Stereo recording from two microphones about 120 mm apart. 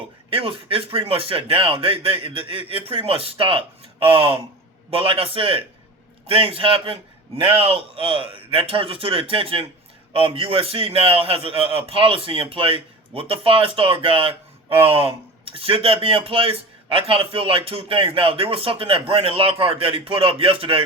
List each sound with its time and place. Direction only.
0.3 s a man's voice: 50° right (ahead or behind)